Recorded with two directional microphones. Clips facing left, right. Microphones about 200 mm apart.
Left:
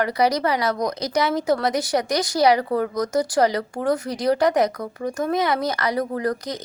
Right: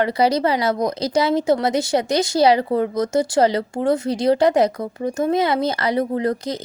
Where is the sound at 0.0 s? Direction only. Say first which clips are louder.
Right 3 dB; 25° right (ahead or behind).